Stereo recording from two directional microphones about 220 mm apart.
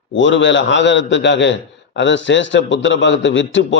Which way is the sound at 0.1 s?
60° left (ahead or behind).